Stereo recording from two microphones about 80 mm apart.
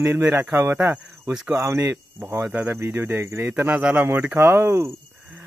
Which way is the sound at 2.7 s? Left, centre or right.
Right.